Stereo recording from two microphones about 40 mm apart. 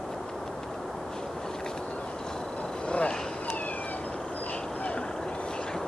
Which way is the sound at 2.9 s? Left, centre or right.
Left.